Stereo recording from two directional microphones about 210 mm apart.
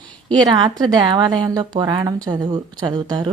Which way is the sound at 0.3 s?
20° right (ahead or behind).